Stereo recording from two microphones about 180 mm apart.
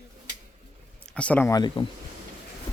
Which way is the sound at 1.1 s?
5° left (ahead or behind).